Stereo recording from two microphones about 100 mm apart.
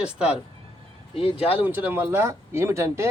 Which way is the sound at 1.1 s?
70° left (ahead or behind).